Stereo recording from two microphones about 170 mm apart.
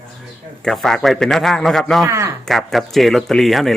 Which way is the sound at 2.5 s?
Centre (ahead or behind).